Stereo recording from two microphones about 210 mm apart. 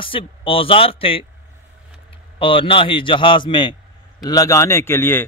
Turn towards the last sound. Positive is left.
turn(degrees=10)  # may be behind; listen again after turning